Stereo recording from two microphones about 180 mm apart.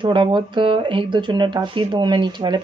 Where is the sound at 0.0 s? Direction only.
25° right (ahead or behind).